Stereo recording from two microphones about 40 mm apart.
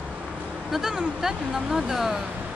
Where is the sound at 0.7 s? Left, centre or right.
Centre.